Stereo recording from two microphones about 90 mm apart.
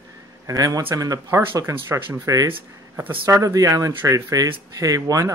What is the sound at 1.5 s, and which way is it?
Speech, 25° right (ahead or behind).